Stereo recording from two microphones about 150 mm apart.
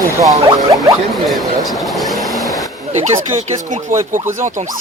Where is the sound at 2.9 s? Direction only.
55° right (ahead or behind).